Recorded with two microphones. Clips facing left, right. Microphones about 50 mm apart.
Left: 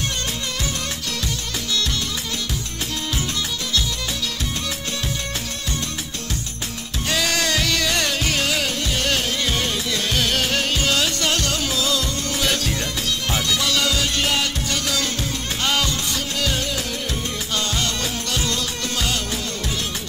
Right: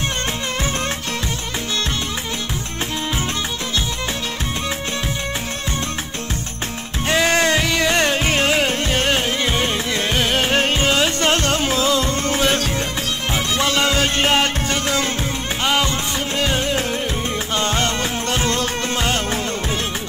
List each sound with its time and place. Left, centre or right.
7.1 s music: right